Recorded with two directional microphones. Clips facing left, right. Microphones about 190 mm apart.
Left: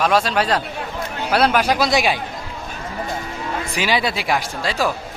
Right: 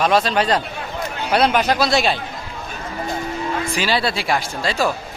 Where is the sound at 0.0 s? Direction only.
5° left (ahead or behind).